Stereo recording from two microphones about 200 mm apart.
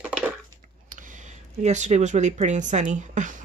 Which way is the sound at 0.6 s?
40° right (ahead or behind).